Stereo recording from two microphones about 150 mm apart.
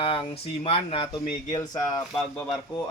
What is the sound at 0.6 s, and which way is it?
Speech, 40° left (ahead or behind).